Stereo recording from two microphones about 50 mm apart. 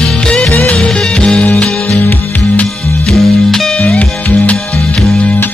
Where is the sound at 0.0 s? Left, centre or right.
Centre.